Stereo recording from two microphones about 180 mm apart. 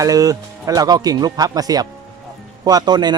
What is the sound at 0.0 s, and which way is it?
Speech, 20° right (ahead or behind).